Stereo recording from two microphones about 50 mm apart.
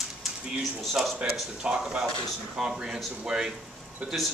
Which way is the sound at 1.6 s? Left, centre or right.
Centre.